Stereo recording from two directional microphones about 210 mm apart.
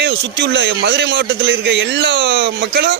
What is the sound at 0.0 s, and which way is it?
A man's voice, 55° right (ahead or behind).